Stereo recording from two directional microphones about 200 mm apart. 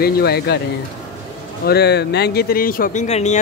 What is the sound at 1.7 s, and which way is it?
Speech, 55° left (ahead or behind).